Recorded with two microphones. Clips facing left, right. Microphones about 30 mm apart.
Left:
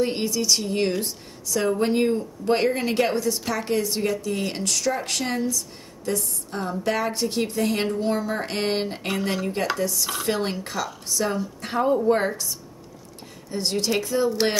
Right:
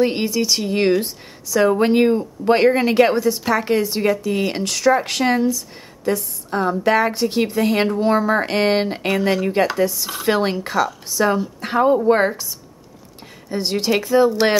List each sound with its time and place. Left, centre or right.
0.0 s speech: right
9.0 s speech: centre
9.8 s speech: right
13.5 s speech: right
14.3 s speech: centre